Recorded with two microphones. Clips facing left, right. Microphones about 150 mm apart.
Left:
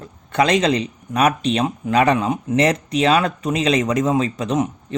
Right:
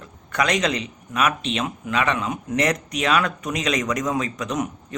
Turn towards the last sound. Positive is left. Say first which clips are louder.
# left 6 dB
turn(degrees=25)  # may be behind; listen again after turning